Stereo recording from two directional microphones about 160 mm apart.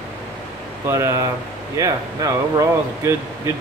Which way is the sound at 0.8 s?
15° right (ahead or behind).